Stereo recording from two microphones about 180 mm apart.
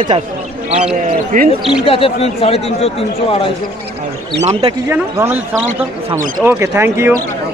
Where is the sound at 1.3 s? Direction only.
50° right (ahead or behind).